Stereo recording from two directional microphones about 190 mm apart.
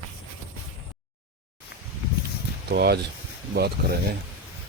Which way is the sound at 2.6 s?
55° right (ahead or behind).